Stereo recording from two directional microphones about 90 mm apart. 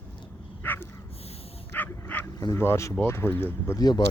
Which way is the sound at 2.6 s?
30° left (ahead or behind).